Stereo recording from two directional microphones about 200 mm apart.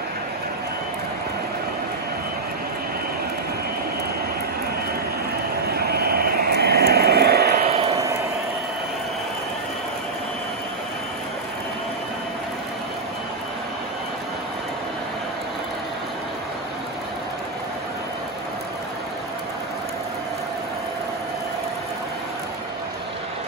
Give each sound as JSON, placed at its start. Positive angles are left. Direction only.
{"t": 5.7, "sound": "vehicle", "side_deg": -50}